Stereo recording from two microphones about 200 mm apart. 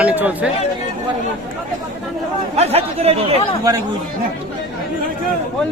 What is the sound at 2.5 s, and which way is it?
Speech, 30° right (ahead or behind).